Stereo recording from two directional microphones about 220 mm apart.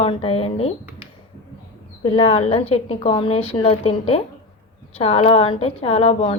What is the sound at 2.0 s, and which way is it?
Speech, 25° left (ahead or behind).